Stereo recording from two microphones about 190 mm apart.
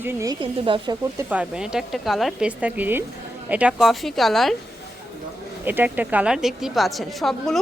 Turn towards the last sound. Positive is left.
turn(degrees=0)  # may be behind; listen again after turning